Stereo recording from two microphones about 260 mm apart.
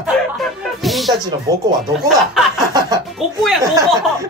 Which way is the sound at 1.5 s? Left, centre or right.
Centre.